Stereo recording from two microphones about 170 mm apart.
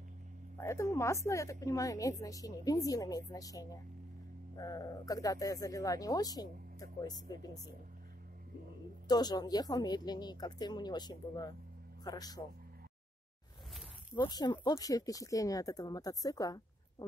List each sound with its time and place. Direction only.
0.6 s a woman's voice: 15° left (ahead or behind)
9.0 s a man's voice: 25° left (ahead or behind)
14.1 s speech: 25° left (ahead or behind)